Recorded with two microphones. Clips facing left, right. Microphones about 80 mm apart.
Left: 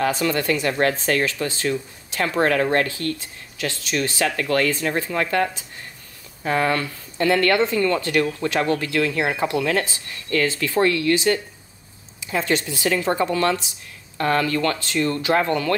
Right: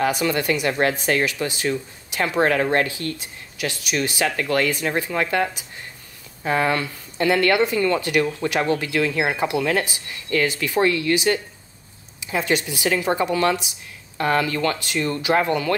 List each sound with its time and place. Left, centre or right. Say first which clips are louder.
0.0 s speech: even; centre